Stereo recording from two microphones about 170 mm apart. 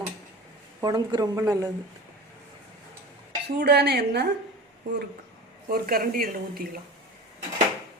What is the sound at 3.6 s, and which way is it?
Speech, 75° right (ahead or behind).